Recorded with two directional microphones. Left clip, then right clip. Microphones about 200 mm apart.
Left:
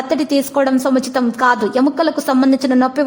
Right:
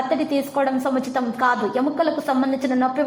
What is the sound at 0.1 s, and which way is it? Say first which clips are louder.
A woman's voice: left 5 dB; 40° left (ahead or behind).